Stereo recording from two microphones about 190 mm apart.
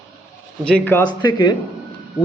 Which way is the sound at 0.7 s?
10° left (ahead or behind).